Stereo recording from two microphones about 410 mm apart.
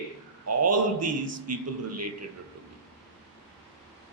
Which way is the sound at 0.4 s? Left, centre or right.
Right.